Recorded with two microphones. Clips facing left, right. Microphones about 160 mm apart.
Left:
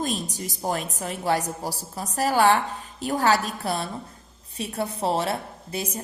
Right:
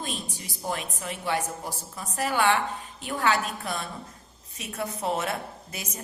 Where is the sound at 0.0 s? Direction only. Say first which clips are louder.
Left 7 dB; 40° left (ahead or behind).